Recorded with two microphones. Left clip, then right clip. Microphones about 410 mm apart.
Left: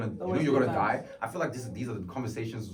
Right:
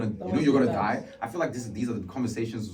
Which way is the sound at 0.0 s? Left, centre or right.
Centre.